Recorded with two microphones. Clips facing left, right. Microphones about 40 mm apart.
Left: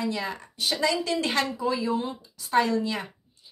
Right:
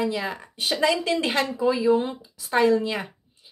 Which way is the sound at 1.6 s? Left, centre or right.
Centre.